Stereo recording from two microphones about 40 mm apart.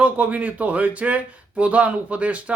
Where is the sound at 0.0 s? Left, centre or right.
Right.